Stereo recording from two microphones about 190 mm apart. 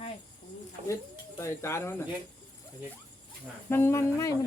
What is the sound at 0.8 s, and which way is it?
Speech, 35° right (ahead or behind).